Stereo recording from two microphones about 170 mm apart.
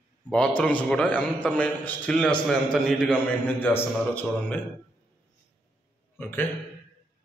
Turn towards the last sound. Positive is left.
turn(degrees=10)  # may be behind; listen again after turning